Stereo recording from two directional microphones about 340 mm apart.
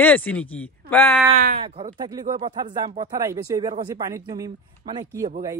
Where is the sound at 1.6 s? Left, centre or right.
Centre.